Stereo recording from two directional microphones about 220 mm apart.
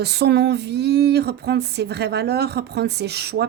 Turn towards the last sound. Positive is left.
turn(degrees=-50)  # may be behind; listen again after turning